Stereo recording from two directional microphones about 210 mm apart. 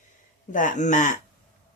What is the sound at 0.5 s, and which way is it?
Speech, 35° left (ahead or behind).